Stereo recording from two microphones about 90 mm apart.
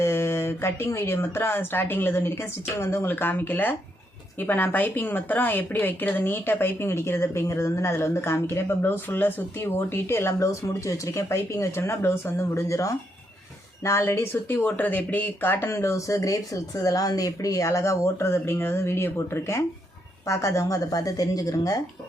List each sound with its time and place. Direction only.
0.0 s a woman's voice: 30° left (ahead or behind)